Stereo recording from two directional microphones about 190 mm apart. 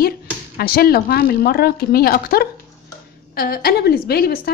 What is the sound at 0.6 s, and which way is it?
A woman's voice, 55° left (ahead or behind).